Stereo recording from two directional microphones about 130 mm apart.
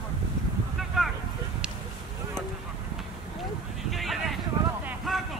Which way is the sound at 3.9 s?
Centre (ahead or behind).